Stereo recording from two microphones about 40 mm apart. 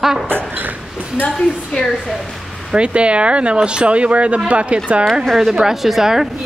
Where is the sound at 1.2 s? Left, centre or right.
Right.